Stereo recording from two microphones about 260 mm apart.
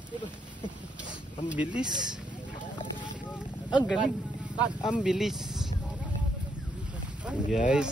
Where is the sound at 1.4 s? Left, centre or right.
Centre.